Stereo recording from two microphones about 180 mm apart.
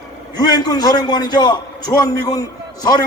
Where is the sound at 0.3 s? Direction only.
20° left (ahead or behind).